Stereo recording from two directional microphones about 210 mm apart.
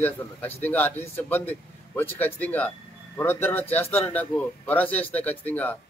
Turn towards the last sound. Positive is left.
turn(degrees=10)  # may be behind; listen again after turning